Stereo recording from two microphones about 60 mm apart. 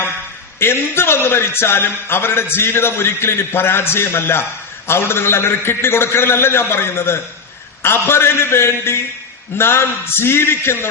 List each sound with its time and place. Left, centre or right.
0.6 s a man's voice: left